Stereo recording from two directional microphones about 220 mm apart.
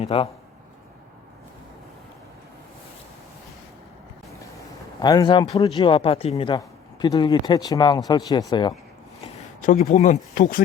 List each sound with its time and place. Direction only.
0.0 s speech: 25° left (ahead or behind)
4.9 s speech: 20° left (ahead or behind)
9.6 s speech: 35° left (ahead or behind)